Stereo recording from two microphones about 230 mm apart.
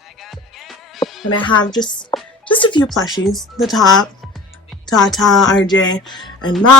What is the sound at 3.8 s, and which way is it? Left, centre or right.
Speech, centre.